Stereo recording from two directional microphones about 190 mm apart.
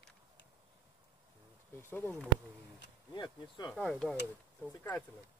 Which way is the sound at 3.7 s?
5° left (ahead or behind).